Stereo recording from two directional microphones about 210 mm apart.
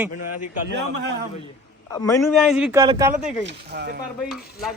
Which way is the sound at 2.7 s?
15° right (ahead or behind).